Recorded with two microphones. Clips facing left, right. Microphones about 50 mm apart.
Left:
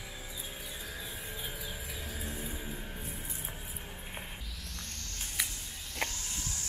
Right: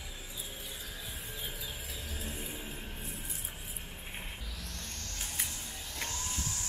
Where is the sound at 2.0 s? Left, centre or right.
Centre.